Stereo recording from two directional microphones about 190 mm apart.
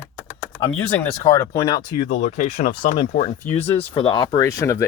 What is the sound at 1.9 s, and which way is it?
Speech, 45° left (ahead or behind).